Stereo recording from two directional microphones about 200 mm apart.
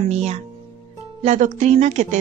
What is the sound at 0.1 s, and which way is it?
A woman's voice, 35° right (ahead or behind).